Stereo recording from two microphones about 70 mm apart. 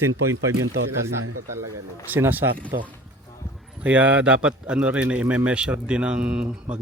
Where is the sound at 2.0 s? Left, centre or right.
Right.